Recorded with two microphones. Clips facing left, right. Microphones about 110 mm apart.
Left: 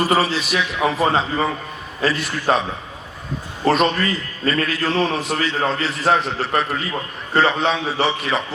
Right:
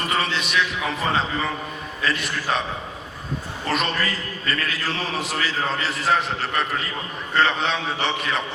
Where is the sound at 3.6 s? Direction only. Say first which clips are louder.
Left 8 dB; 35° left (ahead or behind).